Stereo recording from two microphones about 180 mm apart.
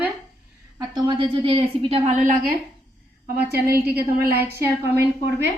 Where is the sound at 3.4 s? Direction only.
60° right (ahead or behind).